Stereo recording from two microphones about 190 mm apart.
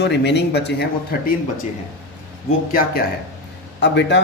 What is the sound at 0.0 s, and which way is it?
Speech, 65° left (ahead or behind).